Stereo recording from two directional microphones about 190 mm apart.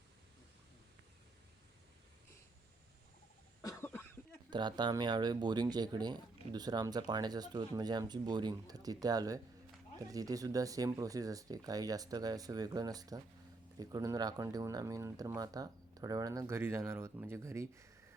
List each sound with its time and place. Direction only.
3.6 s cough: 15° left (ahead or behind)
4.5 s speech: 25° right (ahead or behind)